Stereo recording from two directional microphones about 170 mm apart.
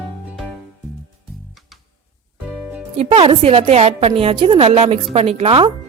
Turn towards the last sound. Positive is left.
turn(degrees=-35)  # may be behind; listen again after turning